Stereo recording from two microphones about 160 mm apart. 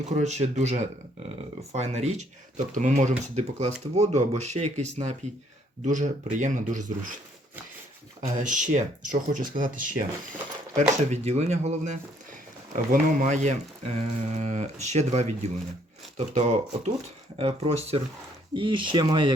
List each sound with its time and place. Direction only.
0.0 s speech: 45° right (ahead or behind)
8.4 s speech: 50° right (ahead or behind)
10.8 s speech: 45° right (ahead or behind)
12.7 s speech: 55° right (ahead or behind); by 19.3 s 30° right (ahead or behind)